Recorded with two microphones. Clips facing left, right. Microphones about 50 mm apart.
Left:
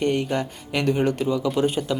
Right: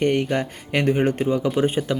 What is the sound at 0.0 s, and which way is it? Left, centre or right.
Speech, right.